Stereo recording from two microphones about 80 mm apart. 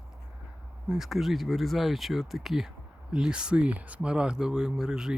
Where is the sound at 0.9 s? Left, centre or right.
Centre.